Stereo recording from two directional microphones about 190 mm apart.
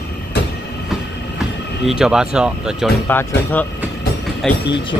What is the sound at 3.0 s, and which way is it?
Speech, 10° left (ahead or behind).